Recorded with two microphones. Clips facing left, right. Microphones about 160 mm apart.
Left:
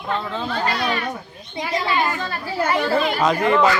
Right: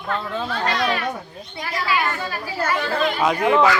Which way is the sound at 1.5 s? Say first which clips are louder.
Left 6 dB; 15° left (ahead or behind).